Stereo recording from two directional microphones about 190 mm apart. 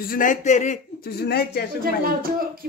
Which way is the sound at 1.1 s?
55° left (ahead or behind).